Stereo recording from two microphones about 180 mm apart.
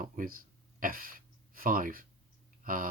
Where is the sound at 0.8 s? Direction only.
50° right (ahead or behind).